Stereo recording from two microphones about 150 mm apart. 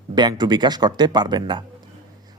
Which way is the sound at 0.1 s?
30° right (ahead or behind).